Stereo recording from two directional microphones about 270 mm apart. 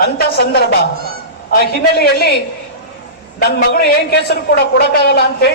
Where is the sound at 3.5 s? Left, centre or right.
Left.